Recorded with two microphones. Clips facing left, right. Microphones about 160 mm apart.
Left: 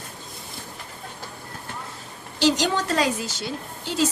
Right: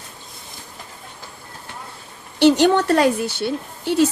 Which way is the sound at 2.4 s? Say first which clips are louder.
Right 8 dB; 60° right (ahead or behind).